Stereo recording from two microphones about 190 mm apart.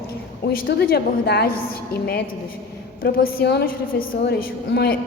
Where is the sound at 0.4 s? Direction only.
60° left (ahead or behind).